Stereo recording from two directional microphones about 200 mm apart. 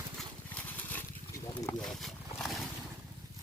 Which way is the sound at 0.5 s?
10° left (ahead or behind).